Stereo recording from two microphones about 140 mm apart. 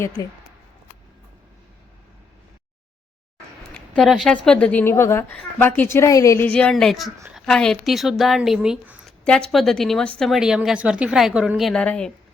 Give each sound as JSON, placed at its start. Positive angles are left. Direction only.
{"t": 0.0, "sound": "speech", "side_deg": 25}
{"t": 3.9, "sound": "a woman's voice", "side_deg": 0}
{"t": 6.5, "sound": "speech", "side_deg": 5}
{"t": 9.2, "sound": "speech", "side_deg": 5}